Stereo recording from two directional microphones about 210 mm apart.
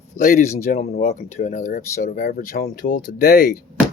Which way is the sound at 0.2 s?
35° left (ahead or behind).